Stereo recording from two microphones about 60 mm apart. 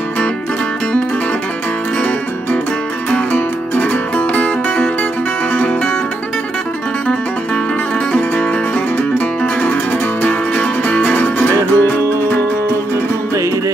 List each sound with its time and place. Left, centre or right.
3.3 s music: left
10.2 s music: left